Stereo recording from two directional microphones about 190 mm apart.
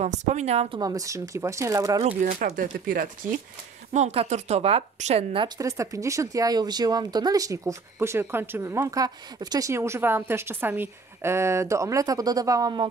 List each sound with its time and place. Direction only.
0.0 s speech: 40° right (ahead or behind)
0.7 s speech: 20° right (ahead or behind)
2.2 s speech: 45° right (ahead or behind)
3.9 s speech: 35° right (ahead or behind)
5.6 s speech: 15° right (ahead or behind)